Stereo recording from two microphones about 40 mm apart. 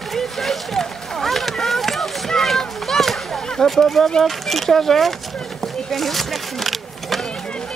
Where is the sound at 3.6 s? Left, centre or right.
Centre.